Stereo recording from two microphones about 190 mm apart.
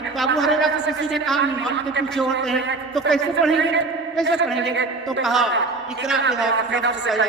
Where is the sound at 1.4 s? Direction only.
70° right (ahead or behind).